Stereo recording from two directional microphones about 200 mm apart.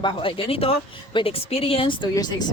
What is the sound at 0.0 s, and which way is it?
A woman's voice, 25° left (ahead or behind).